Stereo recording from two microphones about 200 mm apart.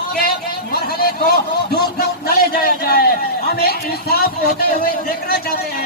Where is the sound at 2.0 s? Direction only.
50° left (ahead or behind).